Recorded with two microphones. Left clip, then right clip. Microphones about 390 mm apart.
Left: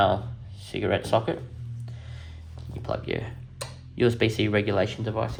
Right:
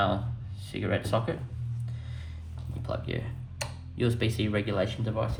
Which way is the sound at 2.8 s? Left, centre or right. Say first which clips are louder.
Left 5 dB; left.